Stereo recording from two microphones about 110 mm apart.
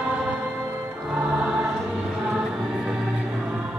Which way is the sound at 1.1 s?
10° right (ahead or behind).